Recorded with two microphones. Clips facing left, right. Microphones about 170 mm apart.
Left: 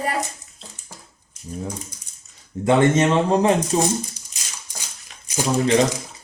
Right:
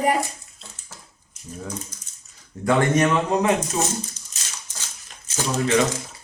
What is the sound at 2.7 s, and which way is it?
Speech, 25° left (ahead or behind).